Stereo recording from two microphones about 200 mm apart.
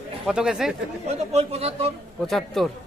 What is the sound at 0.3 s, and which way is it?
Speech, 5° right (ahead or behind).